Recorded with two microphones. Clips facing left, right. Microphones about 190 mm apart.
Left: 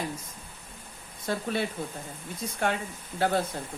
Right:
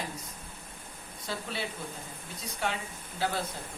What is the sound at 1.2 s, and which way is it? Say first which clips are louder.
Speech: left 7 dB; 50° left (ahead or behind).